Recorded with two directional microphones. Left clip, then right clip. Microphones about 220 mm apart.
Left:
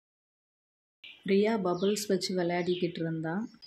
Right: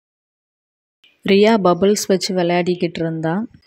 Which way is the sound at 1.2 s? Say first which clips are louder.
Right 15 dB; 40° right (ahead or behind).